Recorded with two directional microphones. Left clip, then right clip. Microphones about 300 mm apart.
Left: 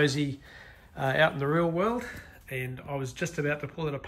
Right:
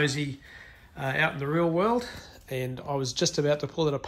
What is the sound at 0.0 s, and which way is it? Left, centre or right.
Speech, centre.